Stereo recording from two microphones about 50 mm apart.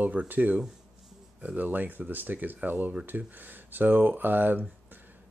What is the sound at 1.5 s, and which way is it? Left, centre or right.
Speech, right.